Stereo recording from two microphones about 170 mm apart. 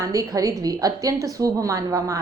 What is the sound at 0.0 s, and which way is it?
A woman's voice, 20° right (ahead or behind).